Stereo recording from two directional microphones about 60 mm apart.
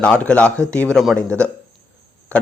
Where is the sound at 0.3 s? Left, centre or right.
Centre.